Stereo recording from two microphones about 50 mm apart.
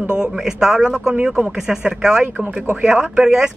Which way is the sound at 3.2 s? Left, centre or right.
Centre.